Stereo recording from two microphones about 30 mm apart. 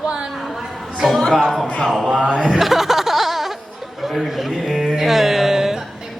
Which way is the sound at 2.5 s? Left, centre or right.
Centre.